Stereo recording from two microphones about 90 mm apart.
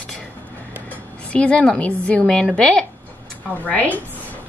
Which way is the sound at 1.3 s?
15° left (ahead or behind).